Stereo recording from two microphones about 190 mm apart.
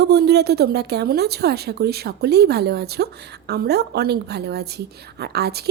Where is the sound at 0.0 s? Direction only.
60° right (ahead or behind).